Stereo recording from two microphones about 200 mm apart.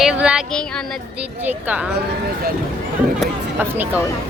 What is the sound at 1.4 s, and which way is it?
Speech, 10° right (ahead or behind).